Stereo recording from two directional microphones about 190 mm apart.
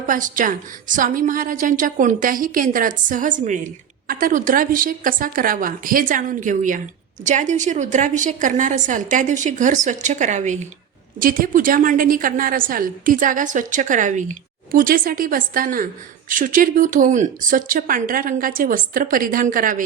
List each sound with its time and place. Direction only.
0.1 s a woman's voice: 45° right (ahead or behind)